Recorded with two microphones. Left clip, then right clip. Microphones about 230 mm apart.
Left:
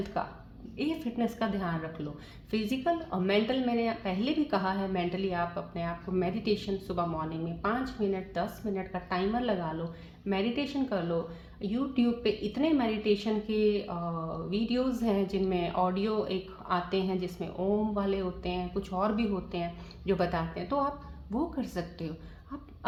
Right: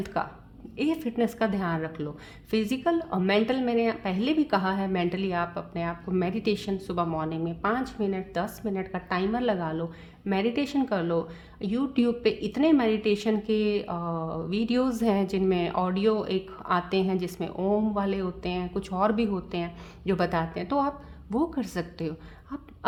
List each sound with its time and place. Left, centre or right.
0.0 s speech: right